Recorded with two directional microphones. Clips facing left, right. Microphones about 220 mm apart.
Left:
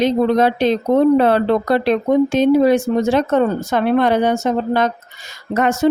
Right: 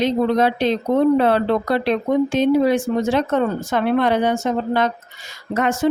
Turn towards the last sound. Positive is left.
turn(degrees=40)  # may be behind; listen again after turning